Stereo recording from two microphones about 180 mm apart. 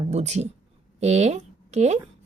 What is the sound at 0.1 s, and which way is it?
A woman's voice, 40° right (ahead or behind).